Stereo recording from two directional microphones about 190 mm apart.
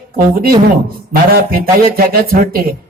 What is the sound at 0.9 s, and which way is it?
A man's voice, 50° right (ahead or behind).